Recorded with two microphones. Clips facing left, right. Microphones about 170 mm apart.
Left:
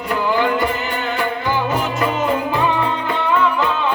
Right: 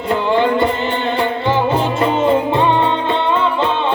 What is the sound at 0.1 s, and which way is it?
Music, 30° right (ahead or behind).